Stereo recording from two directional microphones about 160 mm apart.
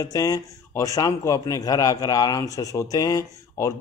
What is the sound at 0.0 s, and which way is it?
A man's voice, 20° left (ahead or behind).